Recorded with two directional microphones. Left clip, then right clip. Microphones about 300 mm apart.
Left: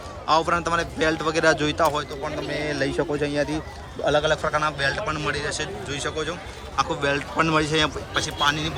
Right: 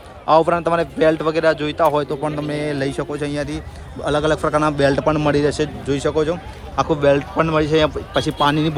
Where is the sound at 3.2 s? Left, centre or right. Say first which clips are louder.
Even; centre.